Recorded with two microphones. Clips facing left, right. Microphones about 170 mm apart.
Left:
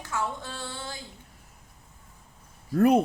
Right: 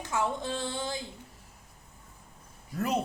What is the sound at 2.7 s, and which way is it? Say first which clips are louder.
Speech: left 10 dB; 55° left (ahead or behind).